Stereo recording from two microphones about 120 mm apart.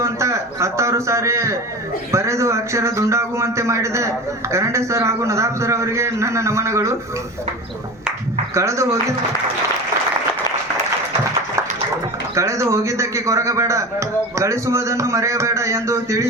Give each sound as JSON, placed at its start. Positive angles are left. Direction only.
{"t": 0.0, "sound": "a man's voice", "side_deg": -25}
{"t": 8.5, "sound": "speech", "side_deg": -25}
{"t": 12.3, "sound": "speech", "side_deg": -25}